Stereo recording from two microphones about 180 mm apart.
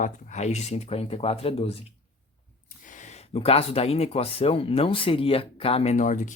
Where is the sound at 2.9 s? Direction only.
40° left (ahead or behind).